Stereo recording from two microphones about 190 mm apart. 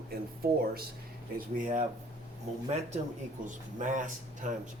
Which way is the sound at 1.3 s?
45° right (ahead or behind).